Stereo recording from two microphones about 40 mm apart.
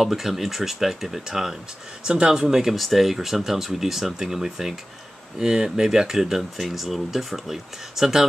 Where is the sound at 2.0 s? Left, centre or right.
Right.